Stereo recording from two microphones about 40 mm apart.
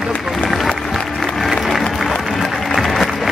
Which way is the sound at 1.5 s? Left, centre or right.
Centre.